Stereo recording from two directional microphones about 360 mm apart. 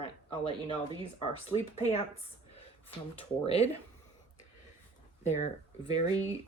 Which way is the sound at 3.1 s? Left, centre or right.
Centre.